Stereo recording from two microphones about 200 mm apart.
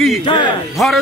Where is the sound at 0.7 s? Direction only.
Centre (ahead or behind).